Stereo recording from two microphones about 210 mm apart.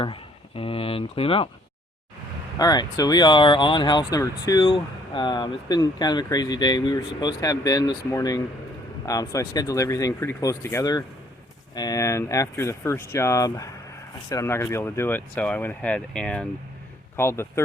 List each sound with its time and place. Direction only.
0.0 s speech: 25° left (ahead or behind)
2.6 s speech: 20° left (ahead or behind)